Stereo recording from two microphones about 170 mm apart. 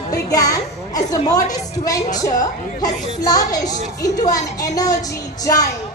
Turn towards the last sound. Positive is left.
turn(degrees=20)  # may be behind; listen again after turning